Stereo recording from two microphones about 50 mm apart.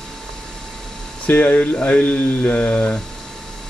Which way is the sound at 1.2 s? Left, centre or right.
Left.